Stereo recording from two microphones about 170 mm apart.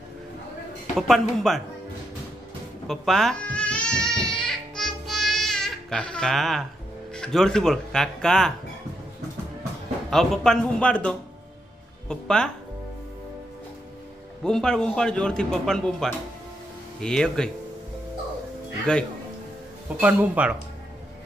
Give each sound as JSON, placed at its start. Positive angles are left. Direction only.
{"t": 0.9, "sound": "speech", "side_deg": 0}
{"t": 2.9, "sound": "music", "side_deg": 0}
{"t": 7.1, "sound": "speech", "side_deg": 5}
{"t": 10.0, "sound": "speech", "side_deg": 0}
{"t": 14.4, "sound": "speech", "side_deg": 5}
{"t": 18.9, "sound": "speech", "side_deg": 5}
{"t": 20.0, "sound": "speech", "side_deg": -10}